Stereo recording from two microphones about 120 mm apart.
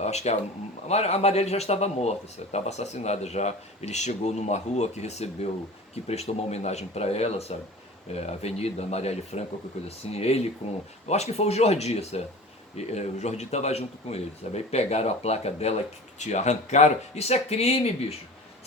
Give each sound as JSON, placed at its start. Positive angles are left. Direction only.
{"t": 0.0, "sound": "speech", "side_deg": 65}
{"t": 16.1, "sound": "speech", "side_deg": 75}